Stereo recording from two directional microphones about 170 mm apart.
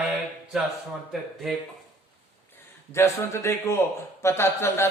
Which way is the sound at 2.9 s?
15° left (ahead or behind).